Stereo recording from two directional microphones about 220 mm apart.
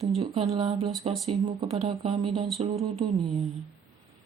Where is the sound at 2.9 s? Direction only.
35° right (ahead or behind).